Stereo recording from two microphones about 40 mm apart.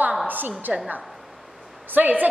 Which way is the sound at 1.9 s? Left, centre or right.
Right.